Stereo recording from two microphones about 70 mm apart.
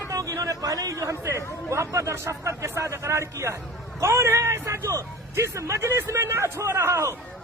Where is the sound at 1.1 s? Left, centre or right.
Right.